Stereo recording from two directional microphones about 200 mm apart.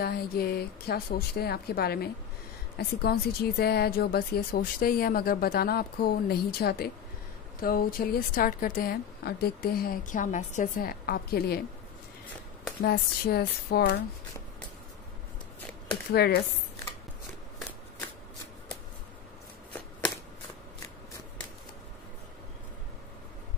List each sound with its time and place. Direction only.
0.0 s a woman's voice: 50° left (ahead or behind)
12.8 s a woman's voice: 50° left (ahead or behind)
16.1 s a woman's voice: 55° left (ahead or behind)